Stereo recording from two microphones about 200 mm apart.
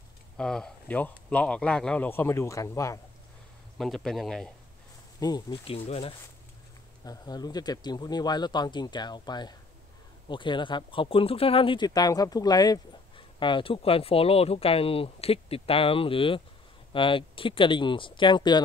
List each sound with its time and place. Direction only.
0.4 s speech: 5° left (ahead or behind)
3.7 s a man's voice: centre (ahead or behind)
5.2 s speech: 20° left (ahead or behind)